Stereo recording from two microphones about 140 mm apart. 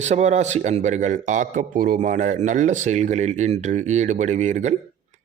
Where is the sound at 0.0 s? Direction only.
55° right (ahead or behind).